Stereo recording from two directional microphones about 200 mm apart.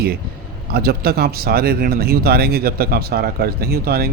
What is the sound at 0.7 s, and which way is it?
Speech, 50° right (ahead or behind).